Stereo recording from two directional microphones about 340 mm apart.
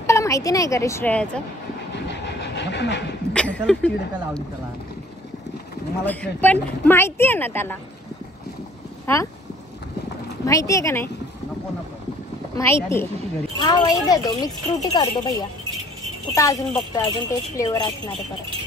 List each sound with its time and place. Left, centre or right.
0.0 s a woman's voice: centre
2.0 s train: left
3.3 s speech: centre
6.0 s speech: centre
9.0 s speech: centre
10.4 s speech: centre
12.5 s speech: centre
16.3 s speech: centre